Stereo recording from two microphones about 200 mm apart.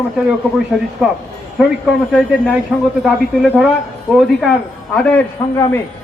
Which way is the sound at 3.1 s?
5° right (ahead or behind).